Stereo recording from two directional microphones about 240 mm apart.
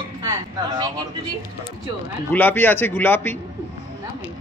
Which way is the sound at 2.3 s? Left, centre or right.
Centre.